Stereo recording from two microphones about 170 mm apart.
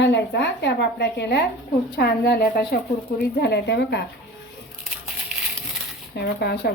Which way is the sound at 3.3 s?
75° left (ahead or behind).